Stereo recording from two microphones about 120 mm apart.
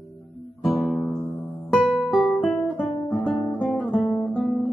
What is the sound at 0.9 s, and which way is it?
Music, centre (ahead or behind).